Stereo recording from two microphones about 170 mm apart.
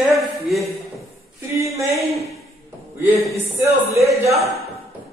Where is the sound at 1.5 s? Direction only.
15° right (ahead or behind).